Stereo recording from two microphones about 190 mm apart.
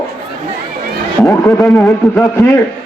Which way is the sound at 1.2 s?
10° left (ahead or behind).